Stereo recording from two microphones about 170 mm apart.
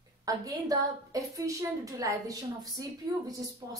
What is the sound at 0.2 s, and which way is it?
A woman's voice, 20° right (ahead or behind).